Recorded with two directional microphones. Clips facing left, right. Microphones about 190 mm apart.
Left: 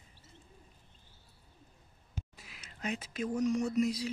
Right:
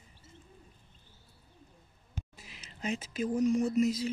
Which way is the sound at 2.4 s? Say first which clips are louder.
Right 2 dB; centre (ahead or behind).